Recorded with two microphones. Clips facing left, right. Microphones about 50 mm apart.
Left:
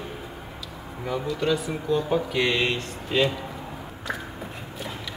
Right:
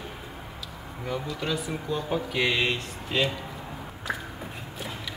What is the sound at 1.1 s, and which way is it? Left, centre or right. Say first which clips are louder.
Speech: left 5 dB; centre.